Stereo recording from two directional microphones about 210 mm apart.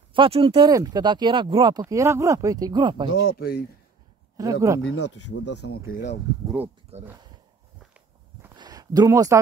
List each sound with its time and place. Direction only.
0.1 s speech: 25° right (ahead or behind)
3.3 s speech: 45° left (ahead or behind)
4.4 s speech: 15° right (ahead or behind)
4.8 s speech: 90° left
5.6 s speech: 70° left (ahead or behind)
6.4 s speech: 5° right (ahead or behind)
6.9 s speech: 30° right (ahead or behind)
7.8 s walk: 5° right (ahead or behind)
8.5 s a sound: 20° right (ahead or behind)